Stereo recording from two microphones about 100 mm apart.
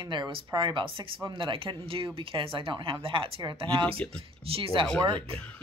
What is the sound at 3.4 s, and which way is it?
Speech, 55° right (ahead or behind).